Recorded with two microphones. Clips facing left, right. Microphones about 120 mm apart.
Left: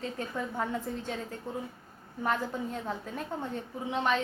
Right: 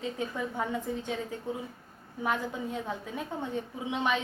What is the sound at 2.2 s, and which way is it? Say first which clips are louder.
A woman's voice: even; 10° right (ahead or behind).